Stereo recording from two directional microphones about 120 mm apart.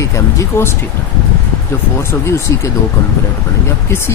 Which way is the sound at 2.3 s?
25° left (ahead or behind).